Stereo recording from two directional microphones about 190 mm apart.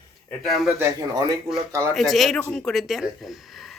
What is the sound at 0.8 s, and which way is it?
Speech, 20° right (ahead or behind).